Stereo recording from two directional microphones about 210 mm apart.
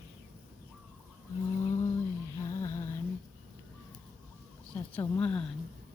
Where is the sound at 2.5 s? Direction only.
15° left (ahead or behind).